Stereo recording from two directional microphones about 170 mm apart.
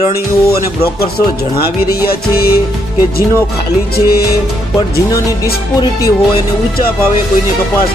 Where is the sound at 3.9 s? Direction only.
65° left (ahead or behind).